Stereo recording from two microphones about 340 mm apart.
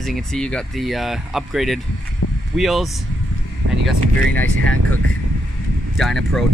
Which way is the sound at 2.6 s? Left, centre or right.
Centre.